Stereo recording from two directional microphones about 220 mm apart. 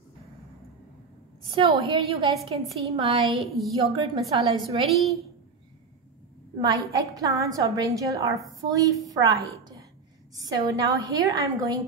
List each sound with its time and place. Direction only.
1.5 s a woman's voice: 25° right (ahead or behind)
3.3 s speech: centre (ahead or behind)
3.9 s a woman's voice: 20° right (ahead or behind)
6.6 s a woman's voice: 15° right (ahead or behind)